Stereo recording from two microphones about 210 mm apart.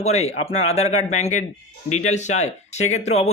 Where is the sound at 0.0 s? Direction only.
30° left (ahead or behind).